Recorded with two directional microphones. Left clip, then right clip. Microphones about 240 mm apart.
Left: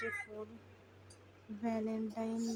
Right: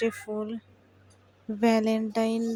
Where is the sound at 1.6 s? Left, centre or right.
Right.